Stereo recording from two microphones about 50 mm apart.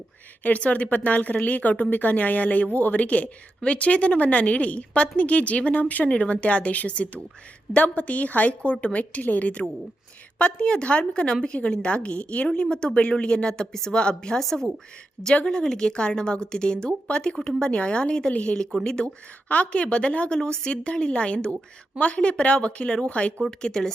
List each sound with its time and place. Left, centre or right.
0.4 s a woman's voice: left; by 14.4 s centre
15.4 s a woman's voice: centre
19.5 s a woman's voice: left